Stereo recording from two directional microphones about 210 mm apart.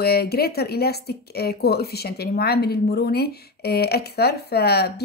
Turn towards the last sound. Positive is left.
turn(degrees=50)  # may be behind; listen again after turning